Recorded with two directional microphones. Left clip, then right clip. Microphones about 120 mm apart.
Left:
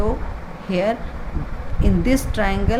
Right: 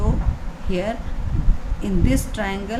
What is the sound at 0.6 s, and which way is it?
Speech, 35° left (ahead or behind).